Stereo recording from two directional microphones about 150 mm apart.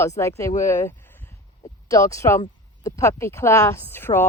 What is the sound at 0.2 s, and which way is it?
Speech, 20° left (ahead or behind).